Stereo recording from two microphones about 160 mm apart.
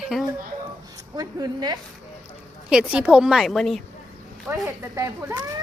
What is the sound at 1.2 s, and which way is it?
Speech, 25° right (ahead or behind).